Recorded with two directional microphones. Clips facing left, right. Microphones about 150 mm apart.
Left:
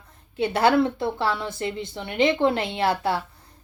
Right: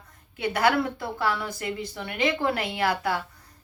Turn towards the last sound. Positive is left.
turn(degrees=25)  # may be behind; listen again after turning